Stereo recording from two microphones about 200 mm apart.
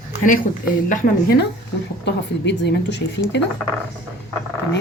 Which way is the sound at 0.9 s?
50° left (ahead or behind).